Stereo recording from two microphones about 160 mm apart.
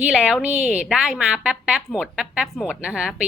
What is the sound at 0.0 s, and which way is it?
A woman's voice, 5° right (ahead or behind).